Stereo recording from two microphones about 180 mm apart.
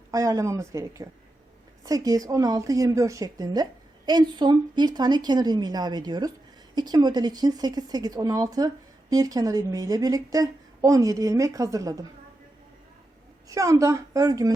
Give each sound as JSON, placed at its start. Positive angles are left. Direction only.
{"t": 0.1, "sound": "a woman's voice", "side_deg": -20}
{"t": 13.5, "sound": "a woman's voice", "side_deg": -20}